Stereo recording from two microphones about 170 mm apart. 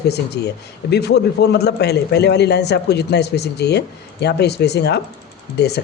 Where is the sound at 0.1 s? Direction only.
75° left (ahead or behind).